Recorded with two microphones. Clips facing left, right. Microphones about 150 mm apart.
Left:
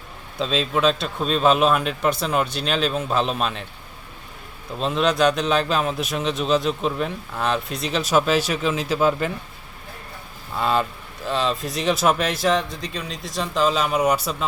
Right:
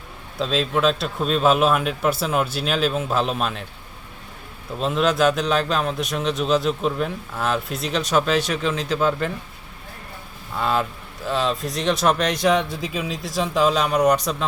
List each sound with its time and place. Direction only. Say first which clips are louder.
0.3 s a man's voice: right 1 dB; centre (ahead or behind)
4.8 s a man's voice: even; centre (ahead or behind)
10.6 s a man's voice: left 1 dB; centre (ahead or behind)